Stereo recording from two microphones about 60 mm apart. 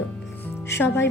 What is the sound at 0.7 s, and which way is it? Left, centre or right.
Speech, left.